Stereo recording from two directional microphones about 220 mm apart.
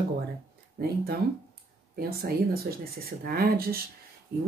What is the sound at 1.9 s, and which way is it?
Speech, 45° right (ahead or behind).